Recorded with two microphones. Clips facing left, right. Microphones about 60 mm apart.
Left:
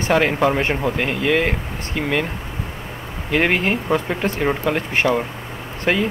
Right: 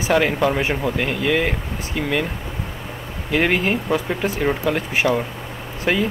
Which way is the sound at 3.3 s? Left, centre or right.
Centre.